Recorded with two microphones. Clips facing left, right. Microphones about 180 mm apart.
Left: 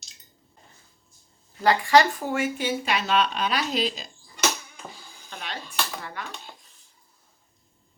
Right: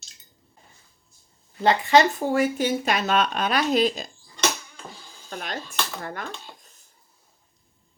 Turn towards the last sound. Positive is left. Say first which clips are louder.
# right 3 dB
turn(degrees=-45)  # may be behind; listen again after turning